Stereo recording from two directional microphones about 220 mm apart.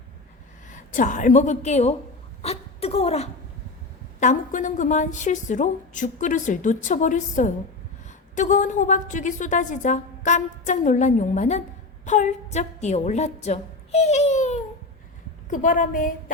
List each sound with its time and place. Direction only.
0.7 s a woman's voice: 35° left (ahead or behind)
2.4 s whimper: 30° left (ahead or behind)
4.2 s a woman's voice: 35° left (ahead or behind)